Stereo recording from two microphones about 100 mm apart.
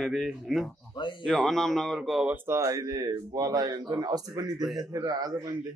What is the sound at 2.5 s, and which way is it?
Speech, 35° right (ahead or behind).